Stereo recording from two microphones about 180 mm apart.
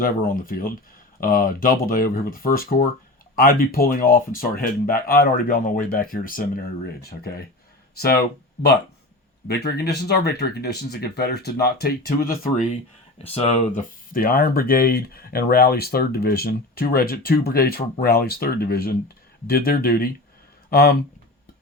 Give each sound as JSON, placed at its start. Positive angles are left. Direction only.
{"t": 0.0, "sound": "speech", "side_deg": 50}